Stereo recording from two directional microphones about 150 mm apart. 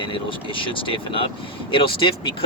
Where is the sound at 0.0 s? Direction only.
35° left (ahead or behind).